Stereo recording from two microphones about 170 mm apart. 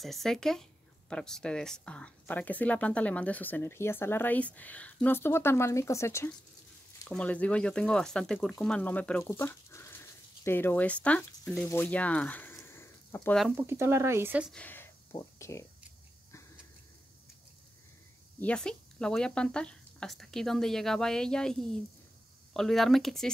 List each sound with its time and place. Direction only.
0.0 s speech: centre (ahead or behind)
13.6 s speech: 15° right (ahead or behind)
14.5 s speech: 10° left (ahead or behind)
18.4 s speech: 5° left (ahead or behind)